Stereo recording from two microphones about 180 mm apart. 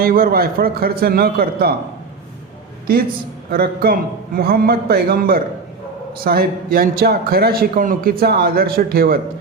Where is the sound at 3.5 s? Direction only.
60° right (ahead or behind).